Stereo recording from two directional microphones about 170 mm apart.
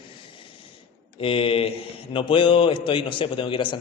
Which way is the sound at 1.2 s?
35° left (ahead or behind).